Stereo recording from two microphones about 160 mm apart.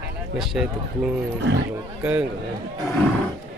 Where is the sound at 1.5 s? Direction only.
90° right.